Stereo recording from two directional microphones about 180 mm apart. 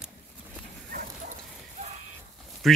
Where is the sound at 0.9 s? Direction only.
45° right (ahead or behind).